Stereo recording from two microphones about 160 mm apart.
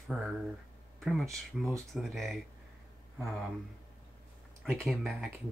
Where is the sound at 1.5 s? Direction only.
Centre (ahead or behind).